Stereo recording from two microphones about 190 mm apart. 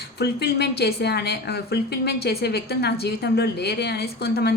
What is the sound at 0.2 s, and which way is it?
A woman's voice, 60° left (ahead or behind).